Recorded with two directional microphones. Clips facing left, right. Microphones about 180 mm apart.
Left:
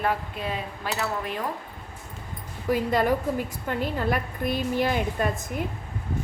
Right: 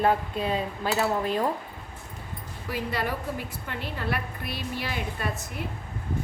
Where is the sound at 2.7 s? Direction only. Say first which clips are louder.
Left 7 dB; 45° left (ahead or behind).